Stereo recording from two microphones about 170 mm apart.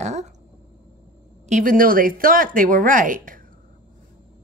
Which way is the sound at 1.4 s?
50° right (ahead or behind).